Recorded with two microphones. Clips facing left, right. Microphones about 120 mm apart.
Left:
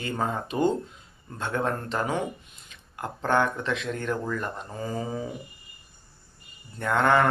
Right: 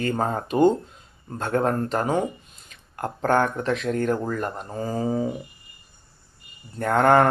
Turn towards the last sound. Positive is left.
turn(degrees=-45)  # may be behind; listen again after turning